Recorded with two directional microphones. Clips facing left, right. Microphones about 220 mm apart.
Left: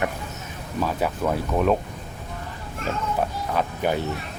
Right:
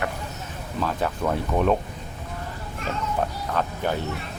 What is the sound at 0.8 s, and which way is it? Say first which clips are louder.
Speech: left 1 dB; 5° left (ahead or behind).